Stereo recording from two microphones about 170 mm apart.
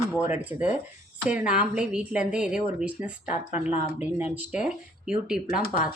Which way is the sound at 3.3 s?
45° left (ahead or behind).